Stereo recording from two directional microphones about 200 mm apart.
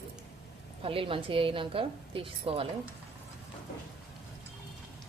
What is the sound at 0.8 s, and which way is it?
A woman's voice, 25° right (ahead or behind).